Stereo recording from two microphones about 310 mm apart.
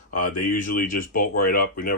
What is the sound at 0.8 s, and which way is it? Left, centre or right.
Speech, left.